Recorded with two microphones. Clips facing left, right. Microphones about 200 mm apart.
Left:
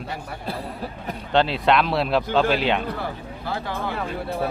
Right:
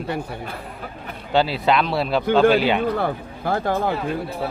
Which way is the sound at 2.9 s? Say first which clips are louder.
Right 6 dB; 55° right (ahead or behind).